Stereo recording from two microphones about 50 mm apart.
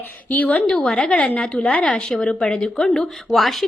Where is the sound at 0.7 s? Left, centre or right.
Centre.